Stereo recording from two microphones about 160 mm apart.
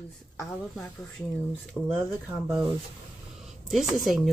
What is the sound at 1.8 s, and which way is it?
Speech, 5° right (ahead or behind).